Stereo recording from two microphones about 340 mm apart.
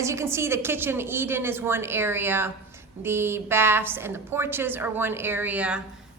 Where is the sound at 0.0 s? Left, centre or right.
Centre.